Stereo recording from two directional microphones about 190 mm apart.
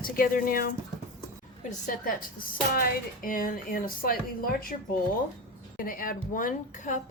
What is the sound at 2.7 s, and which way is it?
A woman's voice, 50° left (ahead or behind).